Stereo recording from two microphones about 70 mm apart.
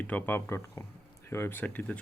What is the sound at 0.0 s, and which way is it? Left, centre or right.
Speech, left.